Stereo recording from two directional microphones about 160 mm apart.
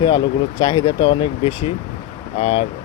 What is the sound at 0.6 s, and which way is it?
Speech, 25° left (ahead or behind).